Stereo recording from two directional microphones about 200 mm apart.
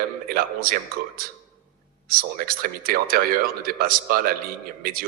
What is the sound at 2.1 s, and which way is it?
Speech, 45° right (ahead or behind).